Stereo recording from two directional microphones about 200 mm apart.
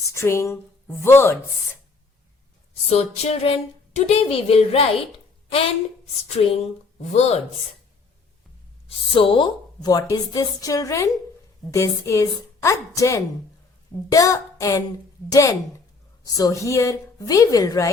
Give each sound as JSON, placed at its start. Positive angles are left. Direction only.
{"t": 0.1, "sound": "a woman's voice", "side_deg": 15}
{"t": 2.9, "sound": "a woman's voice", "side_deg": 30}
{"t": 6.2, "sound": "speech", "side_deg": 30}
{"t": 8.9, "sound": "a woman's voice", "side_deg": 25}